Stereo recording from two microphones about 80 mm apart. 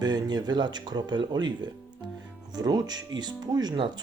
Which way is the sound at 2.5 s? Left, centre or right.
Right.